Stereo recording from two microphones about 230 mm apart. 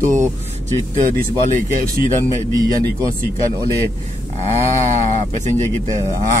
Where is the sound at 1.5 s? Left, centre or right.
Right.